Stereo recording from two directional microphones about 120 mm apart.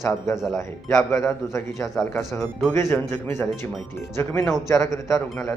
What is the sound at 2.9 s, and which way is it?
Speech, 20° left (ahead or behind).